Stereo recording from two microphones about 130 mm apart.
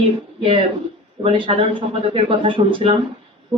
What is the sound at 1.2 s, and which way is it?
A woman's voice, 45° right (ahead or behind).